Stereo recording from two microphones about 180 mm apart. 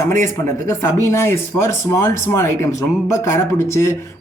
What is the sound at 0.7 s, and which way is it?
Speech, 15° left (ahead or behind).